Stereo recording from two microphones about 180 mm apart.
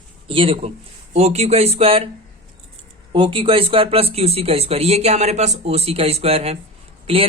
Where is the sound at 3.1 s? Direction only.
30° right (ahead or behind).